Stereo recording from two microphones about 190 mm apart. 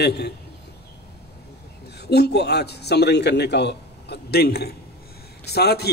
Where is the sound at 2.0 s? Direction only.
60° left (ahead or behind).